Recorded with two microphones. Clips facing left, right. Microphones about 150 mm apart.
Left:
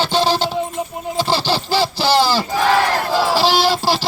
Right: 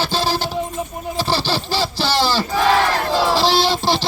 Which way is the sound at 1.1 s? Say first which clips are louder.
Left 2 dB; 15° left (ahead or behind).